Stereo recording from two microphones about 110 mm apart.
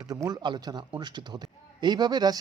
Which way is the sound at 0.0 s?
35° right (ahead or behind).